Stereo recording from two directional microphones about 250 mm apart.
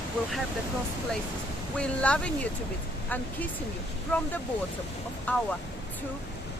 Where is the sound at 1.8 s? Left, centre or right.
Centre.